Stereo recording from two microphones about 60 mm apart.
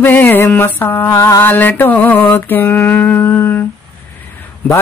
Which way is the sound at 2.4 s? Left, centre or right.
Left.